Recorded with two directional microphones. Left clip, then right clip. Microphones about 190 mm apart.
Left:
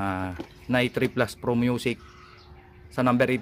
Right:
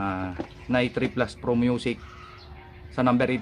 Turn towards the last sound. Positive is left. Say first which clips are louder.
# even
turn(degrees=35)  # may be behind; listen again after turning